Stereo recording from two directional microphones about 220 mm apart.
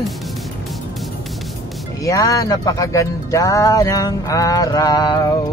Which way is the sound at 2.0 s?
15° left (ahead or behind).